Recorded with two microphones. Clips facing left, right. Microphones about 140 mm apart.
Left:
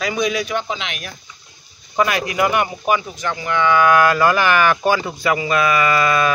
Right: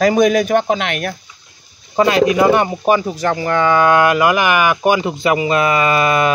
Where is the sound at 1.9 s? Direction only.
25° right (ahead or behind).